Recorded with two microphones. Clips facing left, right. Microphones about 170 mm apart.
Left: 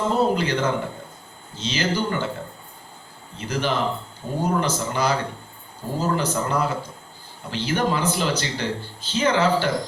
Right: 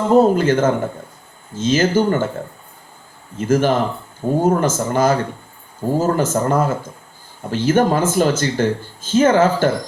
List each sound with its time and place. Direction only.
0.1 s speech: 45° right (ahead or behind)
3.3 s speech: 45° right (ahead or behind)